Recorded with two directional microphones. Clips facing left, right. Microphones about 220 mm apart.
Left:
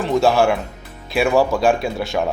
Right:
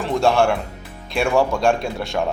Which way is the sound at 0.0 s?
Centre (ahead or behind).